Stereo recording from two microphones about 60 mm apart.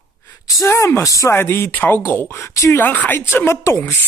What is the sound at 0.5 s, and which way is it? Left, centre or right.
Speech, left.